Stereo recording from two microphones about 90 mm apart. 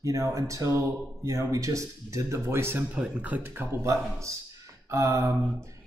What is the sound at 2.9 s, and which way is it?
Speech, 15° right (ahead or behind).